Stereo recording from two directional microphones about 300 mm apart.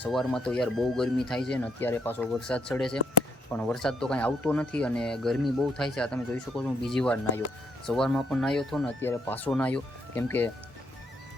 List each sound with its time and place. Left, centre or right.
0.0 s speech: centre